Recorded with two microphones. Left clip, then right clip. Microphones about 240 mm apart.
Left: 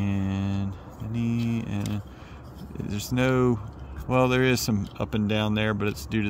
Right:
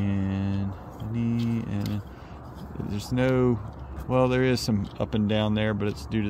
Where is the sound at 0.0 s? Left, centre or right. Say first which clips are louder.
Even; centre.